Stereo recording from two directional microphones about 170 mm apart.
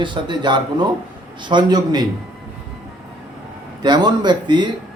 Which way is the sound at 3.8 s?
25° right (ahead or behind).